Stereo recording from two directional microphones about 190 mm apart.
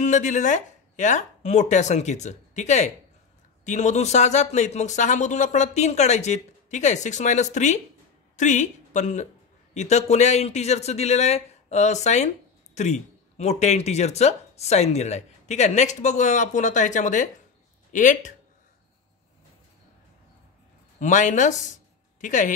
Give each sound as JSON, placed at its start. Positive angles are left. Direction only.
{"t": 0.0, "sound": "speech", "side_deg": 40}
{"t": 21.0, "sound": "speech", "side_deg": 40}